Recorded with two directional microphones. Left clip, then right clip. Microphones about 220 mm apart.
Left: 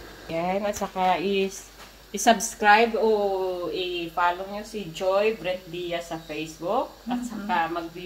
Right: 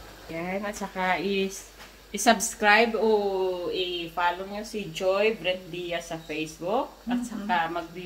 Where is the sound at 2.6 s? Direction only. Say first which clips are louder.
Left 3 dB; 15° right (ahead or behind).